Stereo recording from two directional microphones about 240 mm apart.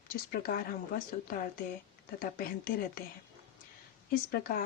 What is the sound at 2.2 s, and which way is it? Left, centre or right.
Speech, left.